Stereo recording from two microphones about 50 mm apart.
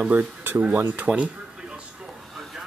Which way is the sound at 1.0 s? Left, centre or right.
Right.